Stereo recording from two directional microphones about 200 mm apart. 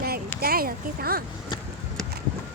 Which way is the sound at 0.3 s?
50° right (ahead or behind).